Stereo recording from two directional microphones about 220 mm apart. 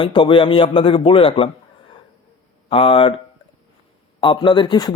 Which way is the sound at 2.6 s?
25° left (ahead or behind).